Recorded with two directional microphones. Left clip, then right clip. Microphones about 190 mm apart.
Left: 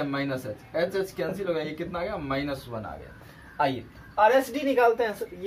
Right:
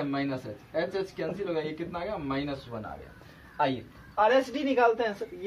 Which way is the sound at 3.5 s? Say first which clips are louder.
Left 2 dB; 30° right (ahead or behind).